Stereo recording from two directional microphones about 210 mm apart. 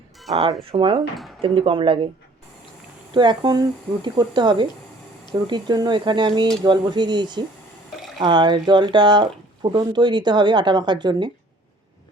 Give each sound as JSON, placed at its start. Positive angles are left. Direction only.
{"t": 0.7, "sound": "speech", "side_deg": -25}
{"t": 3.1, "sound": "speech", "side_deg": -20}